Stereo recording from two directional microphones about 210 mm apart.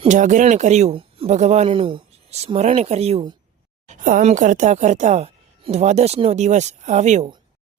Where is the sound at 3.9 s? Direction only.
40° right (ahead or behind).